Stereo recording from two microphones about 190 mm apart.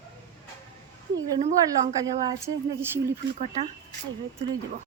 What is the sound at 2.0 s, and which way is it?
Speech, 20° right (ahead or behind).